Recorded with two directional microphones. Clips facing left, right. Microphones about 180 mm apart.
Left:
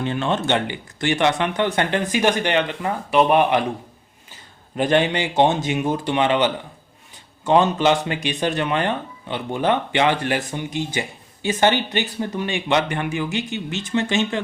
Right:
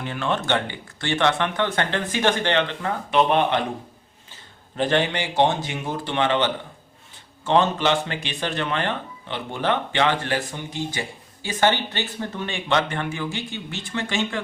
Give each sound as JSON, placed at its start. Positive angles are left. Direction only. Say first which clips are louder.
{"t": 0.0, "sound": "speech", "louder": "left 4 dB", "side_deg": 25}
{"t": 4.8, "sound": "speech", "louder": "left 3 dB", "side_deg": 15}